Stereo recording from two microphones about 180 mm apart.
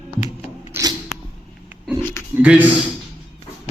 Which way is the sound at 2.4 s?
10° right (ahead or behind).